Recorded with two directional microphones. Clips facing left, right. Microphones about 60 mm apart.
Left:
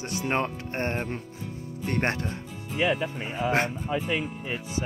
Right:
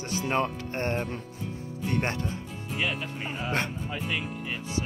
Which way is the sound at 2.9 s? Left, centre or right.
Centre.